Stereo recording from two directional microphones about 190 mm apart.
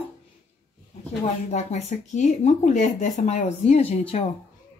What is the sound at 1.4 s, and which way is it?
Speech, 35° left (ahead or behind).